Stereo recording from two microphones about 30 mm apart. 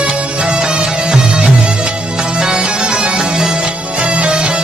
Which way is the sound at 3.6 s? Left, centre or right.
Right.